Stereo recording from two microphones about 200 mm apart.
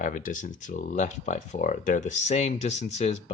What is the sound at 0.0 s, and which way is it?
Speech, 40° left (ahead or behind).